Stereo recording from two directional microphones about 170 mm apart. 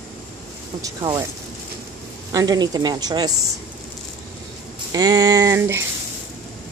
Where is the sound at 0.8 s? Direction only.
20° right (ahead or behind).